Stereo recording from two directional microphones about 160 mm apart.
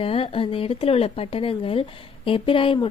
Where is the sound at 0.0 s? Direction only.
35° left (ahead or behind).